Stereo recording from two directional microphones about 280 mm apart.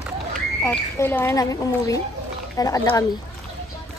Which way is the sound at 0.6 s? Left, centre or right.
Centre.